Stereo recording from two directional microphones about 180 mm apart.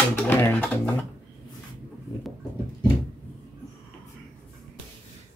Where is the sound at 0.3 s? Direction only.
10° left (ahead or behind).